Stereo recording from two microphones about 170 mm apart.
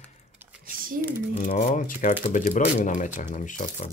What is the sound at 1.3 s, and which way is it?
Speech, 45° left (ahead or behind).